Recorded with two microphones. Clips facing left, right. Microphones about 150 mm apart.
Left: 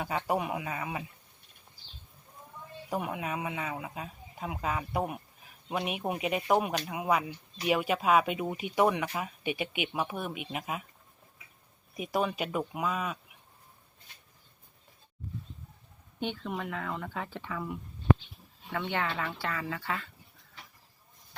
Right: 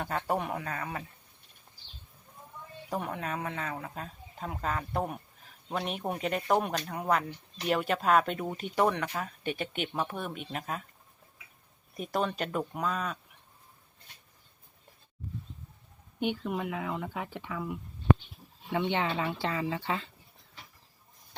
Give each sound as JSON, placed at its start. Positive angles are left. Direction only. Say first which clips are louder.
{"t": 0.0, "sound": "speech", "louder": "left 1 dB", "side_deg": 5}
{"t": 2.9, "sound": "speech", "louder": "left 1 dB", "side_deg": 10}
{"t": 11.9, "sound": "speech", "louder": "left 1 dB", "side_deg": 5}
{"t": 16.2, "sound": "speech", "louder": "right 3 dB", "side_deg": -10}
{"t": 18.7, "sound": "speech", "louder": "right 3 dB", "side_deg": -20}